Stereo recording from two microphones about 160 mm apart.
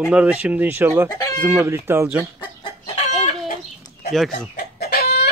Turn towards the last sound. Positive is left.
turn(degrees=85)